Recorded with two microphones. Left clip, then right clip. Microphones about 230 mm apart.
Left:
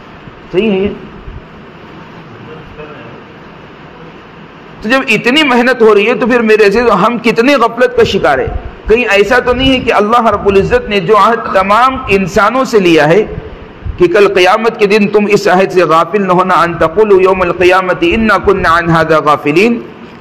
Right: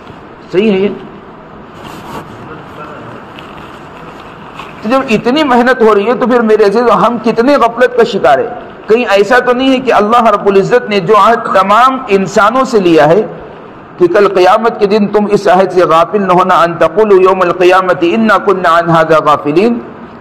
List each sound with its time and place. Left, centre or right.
0.5 s speech: centre
4.8 s a man's voice: left